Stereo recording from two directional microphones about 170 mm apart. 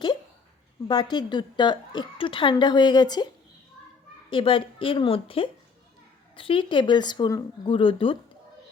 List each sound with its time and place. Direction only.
0.9 s a woman's voice: 25° left (ahead or behind)
4.3 s a woman's voice: 30° left (ahead or behind)